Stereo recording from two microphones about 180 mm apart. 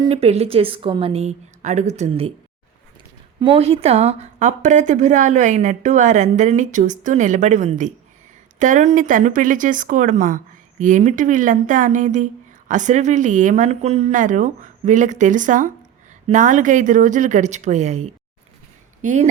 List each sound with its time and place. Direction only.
0.0 s a woman's voice: 35° right (ahead or behind)
3.4 s a woman's voice: 30° right (ahead or behind)